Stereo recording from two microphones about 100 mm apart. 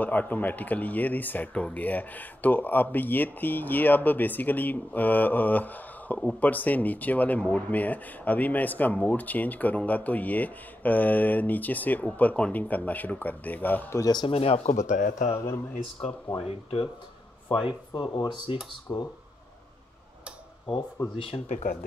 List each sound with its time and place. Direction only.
0.0 s speech: 15° left (ahead or behind)
13.9 s a man's voice: 35° left (ahead or behind)
14.2 s speech: 75° left (ahead or behind)
15.3 s speech: 25° left (ahead or behind)
16.3 s speech: 65° left (ahead or behind); by 19.0 s 45° left (ahead or behind)
21.2 s speech: 75° left (ahead or behind)